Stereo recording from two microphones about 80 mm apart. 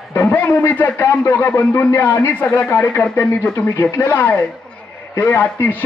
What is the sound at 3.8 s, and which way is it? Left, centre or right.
A man's voice, left.